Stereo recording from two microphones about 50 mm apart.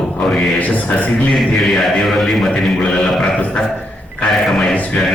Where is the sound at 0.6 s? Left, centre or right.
Left.